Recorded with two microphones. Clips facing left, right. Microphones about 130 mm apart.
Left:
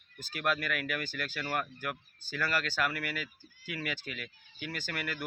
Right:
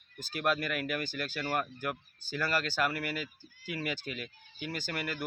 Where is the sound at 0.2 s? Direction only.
30° right (ahead or behind).